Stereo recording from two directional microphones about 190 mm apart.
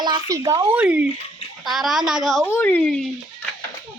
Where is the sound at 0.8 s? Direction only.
5° right (ahead or behind).